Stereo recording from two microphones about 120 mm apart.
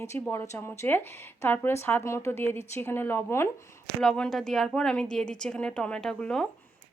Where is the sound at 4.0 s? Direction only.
5° left (ahead or behind).